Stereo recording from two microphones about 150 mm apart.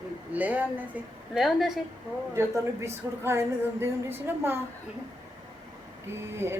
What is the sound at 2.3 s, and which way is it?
Speech, 15° right (ahead or behind).